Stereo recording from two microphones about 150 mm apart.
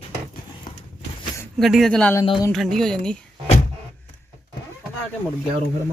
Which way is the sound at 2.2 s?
30° left (ahead or behind).